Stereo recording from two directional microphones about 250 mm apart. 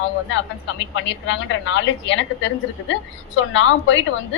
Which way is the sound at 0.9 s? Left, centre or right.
Left.